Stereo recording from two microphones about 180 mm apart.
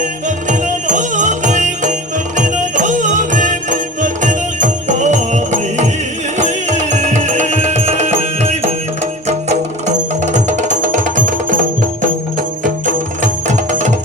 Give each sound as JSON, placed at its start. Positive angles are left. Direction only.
{"t": 0.3, "sound": "music", "side_deg": -45}
{"t": 13.5, "sound": "music", "side_deg": -40}